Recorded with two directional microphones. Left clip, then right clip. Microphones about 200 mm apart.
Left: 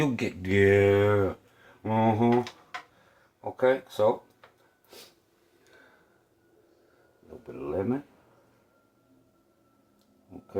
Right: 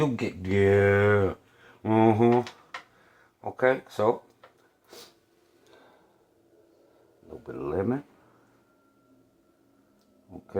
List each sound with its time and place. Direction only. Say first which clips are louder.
0.0 s speech: right 1 dB; centre (ahead or behind)
0.8 s speech: right 1 dB; 20° right (ahead or behind)
1.8 s speech: right 3 dB; 35° right (ahead or behind)
3.6 s speech: left 1 dB; 30° right (ahead or behind)
7.4 s speech: right 2 dB; 25° right (ahead or behind)